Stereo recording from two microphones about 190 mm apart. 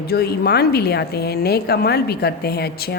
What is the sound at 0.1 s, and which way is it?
A woman's voice, 55° left (ahead or behind).